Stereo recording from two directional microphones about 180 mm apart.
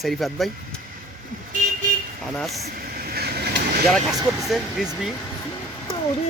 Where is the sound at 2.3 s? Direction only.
Centre (ahead or behind).